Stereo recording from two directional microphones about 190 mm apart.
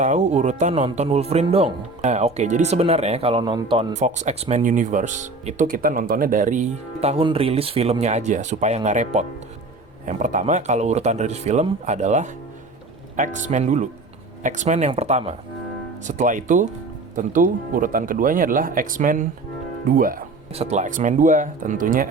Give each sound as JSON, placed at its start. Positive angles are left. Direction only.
{"t": 0.0, "sound": "speech", "side_deg": -40}
{"t": 20.5, "sound": "speech", "side_deg": -35}